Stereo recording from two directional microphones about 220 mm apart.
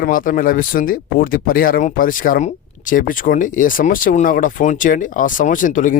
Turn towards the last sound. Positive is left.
turn(degrees=35)  # may be behind; listen again after turning